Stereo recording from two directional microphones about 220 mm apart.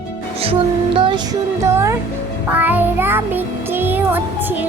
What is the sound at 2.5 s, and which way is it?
Child singing, 5° right (ahead or behind).